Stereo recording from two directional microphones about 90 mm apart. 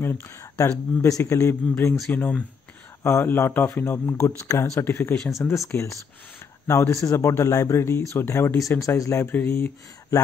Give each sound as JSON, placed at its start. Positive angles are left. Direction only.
{"t": 0.0, "sound": "speech", "side_deg": 25}
{"t": 2.0, "sound": "speech", "side_deg": 15}
{"t": 3.0, "sound": "speech", "side_deg": 30}
{"t": 5.1, "sound": "speech", "side_deg": 5}
{"t": 5.7, "sound": "speech", "side_deg": 35}
{"t": 9.3, "sound": "speech", "side_deg": 25}